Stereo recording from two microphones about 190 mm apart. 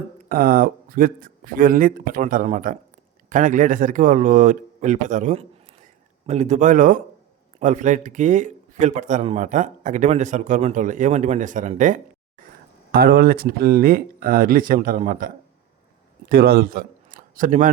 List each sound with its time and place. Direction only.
0.3 s a man's voice: 50° right (ahead or behind)
12.9 s speech: 55° right (ahead or behind)
16.3 s speech: 50° right (ahead or behind)